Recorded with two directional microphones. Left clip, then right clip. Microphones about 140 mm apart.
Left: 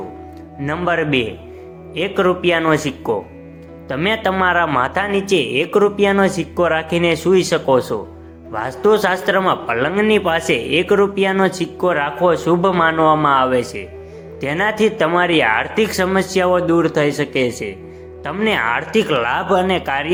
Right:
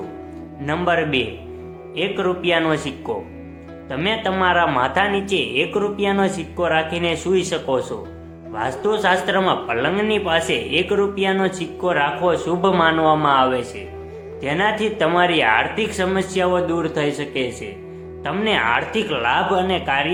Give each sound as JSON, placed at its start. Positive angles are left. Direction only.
{"t": 0.6, "sound": "speech", "side_deg": 30}
{"t": 3.8, "sound": "speech", "side_deg": 45}